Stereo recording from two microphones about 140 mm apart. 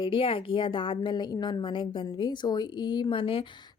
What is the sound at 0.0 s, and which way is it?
Speech, 40° left (ahead or behind).